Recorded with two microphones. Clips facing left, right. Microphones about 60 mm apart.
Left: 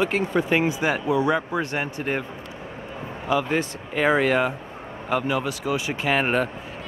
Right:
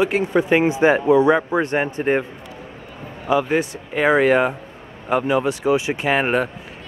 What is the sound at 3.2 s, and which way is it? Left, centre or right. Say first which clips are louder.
Speech: right 4 dB; centre.